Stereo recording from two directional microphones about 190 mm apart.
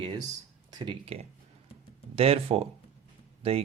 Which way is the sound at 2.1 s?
30° right (ahead or behind).